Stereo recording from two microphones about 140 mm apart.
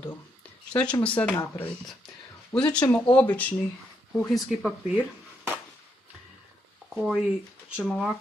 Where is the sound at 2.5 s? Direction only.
5° left (ahead or behind).